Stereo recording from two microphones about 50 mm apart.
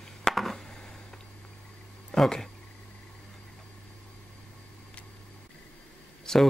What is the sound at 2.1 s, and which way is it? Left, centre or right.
Speech, centre.